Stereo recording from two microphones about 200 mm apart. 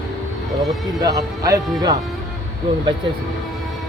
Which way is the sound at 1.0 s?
15° right (ahead or behind).